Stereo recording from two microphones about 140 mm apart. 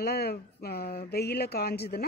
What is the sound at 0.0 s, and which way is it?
Speech, 90° left.